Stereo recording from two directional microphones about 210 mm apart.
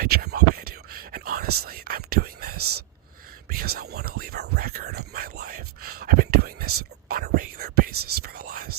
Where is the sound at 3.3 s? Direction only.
45° right (ahead or behind).